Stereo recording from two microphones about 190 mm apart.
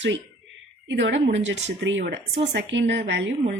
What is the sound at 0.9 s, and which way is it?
A woman's voice, 70° right (ahead or behind).